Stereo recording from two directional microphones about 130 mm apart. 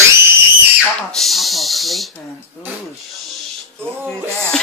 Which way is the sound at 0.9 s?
Centre (ahead or behind).